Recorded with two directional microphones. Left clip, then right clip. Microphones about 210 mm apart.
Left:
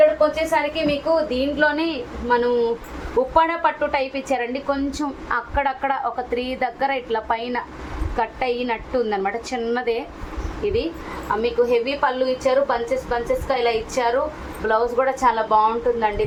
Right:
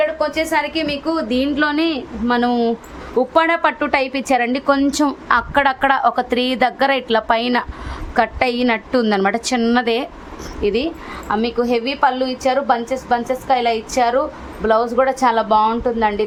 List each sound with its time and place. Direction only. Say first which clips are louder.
0.2 s a woman's voice: right 1 dB; 55° right (ahead or behind)